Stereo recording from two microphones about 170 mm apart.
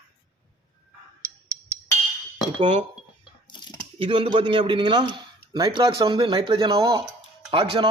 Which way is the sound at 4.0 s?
30° right (ahead or behind).